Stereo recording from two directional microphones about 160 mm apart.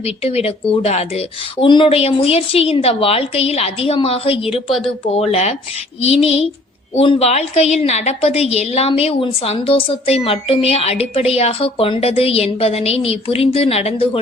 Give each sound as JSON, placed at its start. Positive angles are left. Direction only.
{"t": 0.0, "sound": "a woman's voice", "side_deg": 40}